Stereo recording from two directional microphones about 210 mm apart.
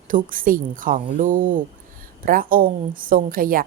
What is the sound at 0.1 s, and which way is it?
A woman's voice, 40° right (ahead or behind).